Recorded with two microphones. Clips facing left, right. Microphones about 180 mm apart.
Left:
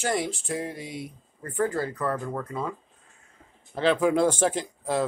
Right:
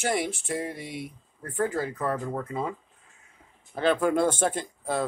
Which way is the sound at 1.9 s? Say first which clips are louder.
Even; 20° right (ahead or behind).